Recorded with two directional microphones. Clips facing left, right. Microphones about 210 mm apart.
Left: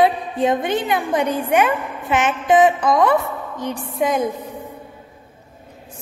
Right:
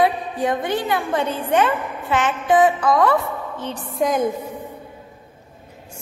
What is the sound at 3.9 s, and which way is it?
Speech, centre (ahead or behind).